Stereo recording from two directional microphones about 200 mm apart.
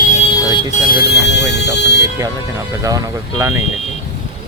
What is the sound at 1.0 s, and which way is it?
Speech, 55° left (ahead or behind).